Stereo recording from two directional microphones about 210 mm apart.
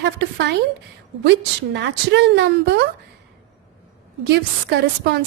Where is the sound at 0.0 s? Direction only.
55° right (ahead or behind).